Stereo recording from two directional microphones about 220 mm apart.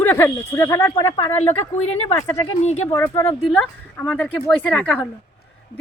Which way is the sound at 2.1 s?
15° left (ahead or behind).